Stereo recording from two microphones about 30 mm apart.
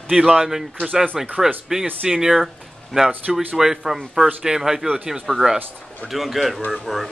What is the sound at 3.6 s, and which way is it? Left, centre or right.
Speech, centre.